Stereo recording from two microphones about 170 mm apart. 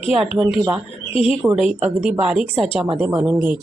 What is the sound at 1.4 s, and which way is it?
A woman's voice, 5° right (ahead or behind).